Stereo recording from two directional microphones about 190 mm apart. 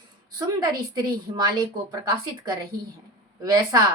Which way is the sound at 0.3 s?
20° right (ahead or behind).